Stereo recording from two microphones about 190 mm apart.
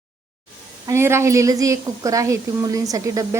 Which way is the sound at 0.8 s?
15° right (ahead or behind).